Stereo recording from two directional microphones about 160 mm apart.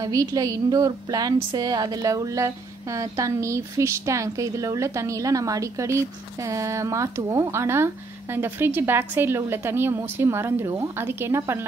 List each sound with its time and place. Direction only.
0.0 s a woman's voice: 25° right (ahead or behind)